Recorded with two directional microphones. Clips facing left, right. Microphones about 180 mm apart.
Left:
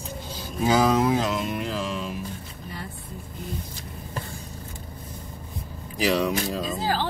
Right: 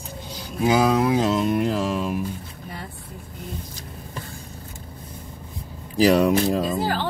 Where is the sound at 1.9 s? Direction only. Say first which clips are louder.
Right 6 dB; 50° right (ahead or behind).